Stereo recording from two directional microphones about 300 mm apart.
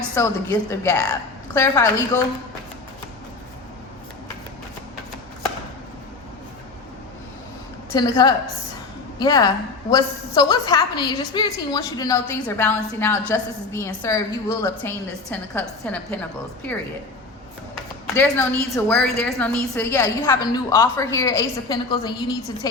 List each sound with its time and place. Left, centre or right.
0.1 s a woman's voice: centre
7.9 s a woman's voice: centre
18.0 s a woman's voice: centre